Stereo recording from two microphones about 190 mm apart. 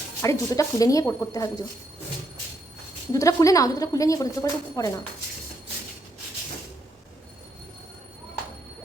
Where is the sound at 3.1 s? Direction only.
15° left (ahead or behind).